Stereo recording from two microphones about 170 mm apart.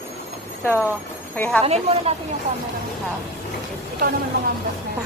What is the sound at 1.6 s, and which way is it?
Speech, 35° right (ahead or behind).